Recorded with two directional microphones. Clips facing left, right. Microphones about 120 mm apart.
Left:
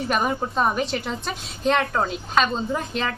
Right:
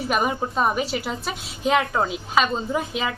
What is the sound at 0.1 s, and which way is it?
A woman's voice, 5° right (ahead or behind).